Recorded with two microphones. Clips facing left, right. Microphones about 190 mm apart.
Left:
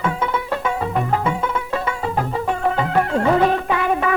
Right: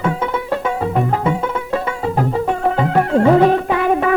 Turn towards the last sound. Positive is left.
turn(degrees=-40)  # may be behind; listen again after turning